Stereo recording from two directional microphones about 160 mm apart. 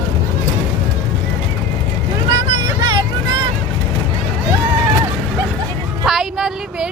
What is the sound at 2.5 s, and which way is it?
Vehicle, 25° right (ahead or behind).